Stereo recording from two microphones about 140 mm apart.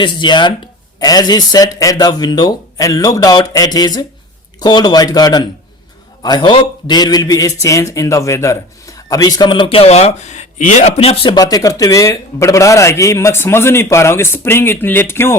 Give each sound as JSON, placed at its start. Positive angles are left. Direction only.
{"t": 0.0, "sound": "a man's voice", "side_deg": 35}